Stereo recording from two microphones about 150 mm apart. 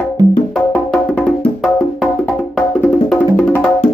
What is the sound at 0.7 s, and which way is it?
Music, 10° left (ahead or behind).